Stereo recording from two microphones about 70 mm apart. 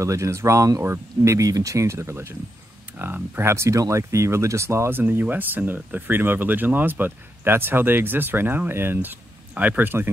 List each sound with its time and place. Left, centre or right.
0.0 s speech: right
3.0 s speech: right